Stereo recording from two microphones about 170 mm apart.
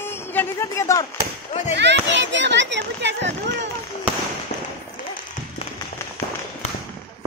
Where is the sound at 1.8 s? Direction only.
90° right.